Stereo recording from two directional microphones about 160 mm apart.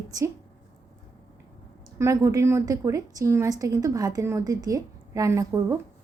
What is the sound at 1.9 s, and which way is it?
A woman's voice, 20° right (ahead or behind).